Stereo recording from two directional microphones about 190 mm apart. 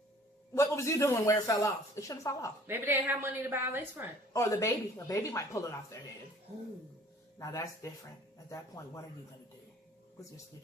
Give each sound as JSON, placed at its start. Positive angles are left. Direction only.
{"t": 0.5, "sound": "speech", "side_deg": 15}
{"t": 2.6, "sound": "a woman's voice", "side_deg": -10}
{"t": 4.3, "sound": "speech", "side_deg": 15}
{"t": 7.3, "sound": "speech", "side_deg": 15}